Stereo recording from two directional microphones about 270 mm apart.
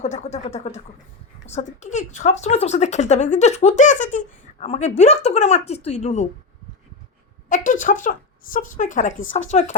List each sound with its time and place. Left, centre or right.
0.0 s speech: left
7.5 s speech: left